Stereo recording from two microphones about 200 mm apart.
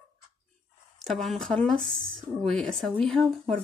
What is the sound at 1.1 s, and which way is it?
Speech, centre (ahead or behind).